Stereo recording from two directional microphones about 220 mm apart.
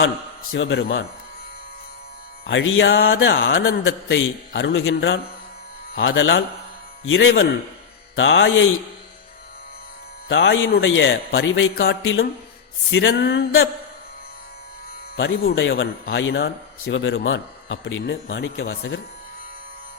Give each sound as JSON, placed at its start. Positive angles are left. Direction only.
{"t": 0.5, "sound": "a man's voice", "side_deg": 55}
{"t": 2.5, "sound": "a man's voice", "side_deg": 60}
{"t": 10.2, "sound": "a man's voice", "side_deg": 60}
{"t": 15.1, "sound": "a man's voice", "side_deg": 60}